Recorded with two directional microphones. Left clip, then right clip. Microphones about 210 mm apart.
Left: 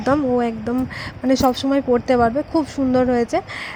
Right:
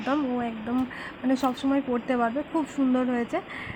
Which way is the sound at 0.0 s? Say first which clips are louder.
Left 9 dB; 35° left (ahead or behind).